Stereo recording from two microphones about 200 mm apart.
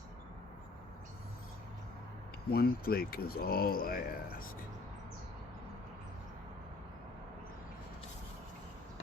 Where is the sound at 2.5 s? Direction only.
50° left (ahead or behind).